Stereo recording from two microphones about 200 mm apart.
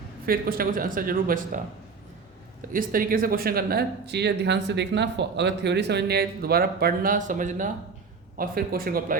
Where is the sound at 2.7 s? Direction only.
45° right (ahead or behind).